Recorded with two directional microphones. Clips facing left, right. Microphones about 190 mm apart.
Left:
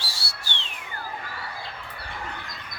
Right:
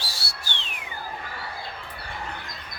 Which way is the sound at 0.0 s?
15° right (ahead or behind).